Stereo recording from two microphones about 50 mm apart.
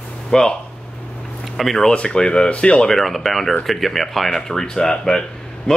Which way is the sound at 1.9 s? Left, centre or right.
Centre.